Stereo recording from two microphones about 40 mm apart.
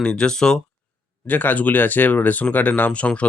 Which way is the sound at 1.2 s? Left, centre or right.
Left.